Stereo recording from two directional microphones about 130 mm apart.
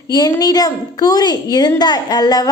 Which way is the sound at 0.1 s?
30° left (ahead or behind).